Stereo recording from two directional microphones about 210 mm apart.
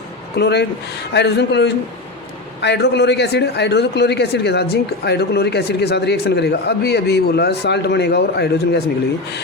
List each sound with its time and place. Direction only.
0.3 s a man's voice: 50° left (ahead or behind)